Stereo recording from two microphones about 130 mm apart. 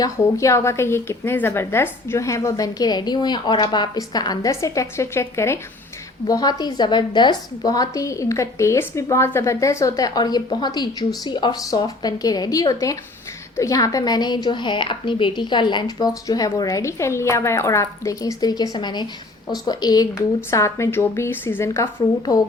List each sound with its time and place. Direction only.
0.0 s a woman's voice: 25° left (ahead or behind)